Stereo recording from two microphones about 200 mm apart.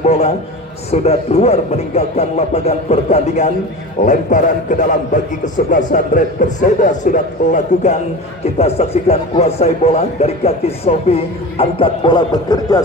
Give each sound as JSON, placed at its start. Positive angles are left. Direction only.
{"t": 0.0, "sound": "a man's voice", "side_deg": 30}